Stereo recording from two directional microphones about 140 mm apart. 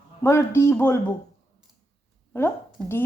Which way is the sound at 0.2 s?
20° left (ahead or behind).